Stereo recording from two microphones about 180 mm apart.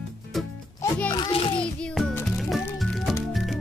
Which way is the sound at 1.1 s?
30° left (ahead or behind).